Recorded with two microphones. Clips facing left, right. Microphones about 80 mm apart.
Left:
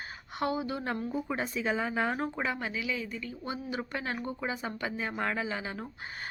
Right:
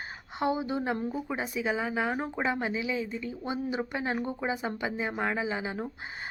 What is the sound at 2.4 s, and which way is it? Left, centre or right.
Speech, right.